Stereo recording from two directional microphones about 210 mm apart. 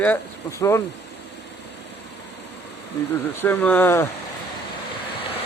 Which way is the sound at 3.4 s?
10° left (ahead or behind).